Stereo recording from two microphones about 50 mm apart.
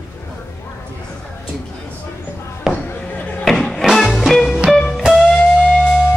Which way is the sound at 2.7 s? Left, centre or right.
Centre.